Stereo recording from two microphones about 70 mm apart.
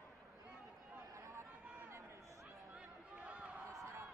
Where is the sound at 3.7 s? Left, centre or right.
Right.